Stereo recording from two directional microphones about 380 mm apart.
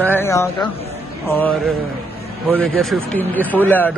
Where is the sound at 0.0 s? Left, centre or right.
Centre.